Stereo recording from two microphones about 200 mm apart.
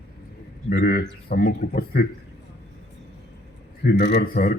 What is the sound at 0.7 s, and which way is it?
Speech, 50° left (ahead or behind).